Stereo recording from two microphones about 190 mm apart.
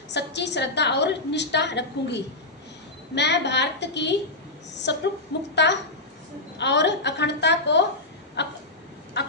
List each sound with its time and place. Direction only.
0.1 s a woman's voice: 65° left (ahead or behind)
9.2 s fowl: 65° left (ahead or behind)